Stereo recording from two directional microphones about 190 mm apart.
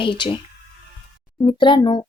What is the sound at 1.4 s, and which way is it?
Speech, 25° left (ahead or behind).